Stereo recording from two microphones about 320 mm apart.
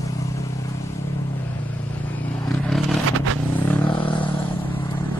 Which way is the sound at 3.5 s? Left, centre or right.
Centre.